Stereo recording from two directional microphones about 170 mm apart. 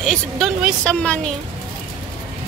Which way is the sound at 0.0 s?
Centre (ahead or behind).